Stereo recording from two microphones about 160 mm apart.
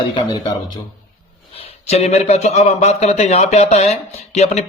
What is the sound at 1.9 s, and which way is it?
Speech, 40° left (ahead or behind).